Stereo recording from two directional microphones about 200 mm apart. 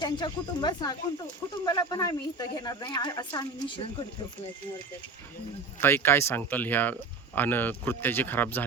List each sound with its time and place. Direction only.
0.0 s speech: 20° left (ahead or behind)
5.8 s speech: 10° left (ahead or behind)